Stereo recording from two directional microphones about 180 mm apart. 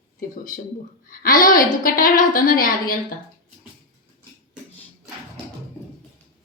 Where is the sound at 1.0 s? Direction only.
50° left (ahead or behind).